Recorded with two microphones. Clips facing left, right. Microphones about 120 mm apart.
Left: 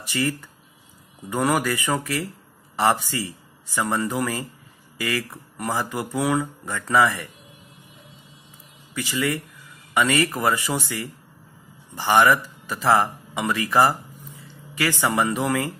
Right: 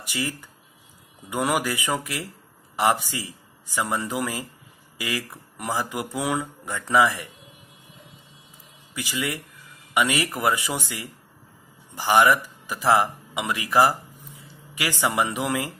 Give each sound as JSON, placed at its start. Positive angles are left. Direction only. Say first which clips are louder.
{"t": 0.0, "sound": "speech", "louder": "left 5 dB", "side_deg": -15}
{"t": 8.9, "sound": "speech", "louder": "left 4 dB", "side_deg": -15}
{"t": 12.1, "sound": "speech", "louder": "left 1 dB", "side_deg": -15}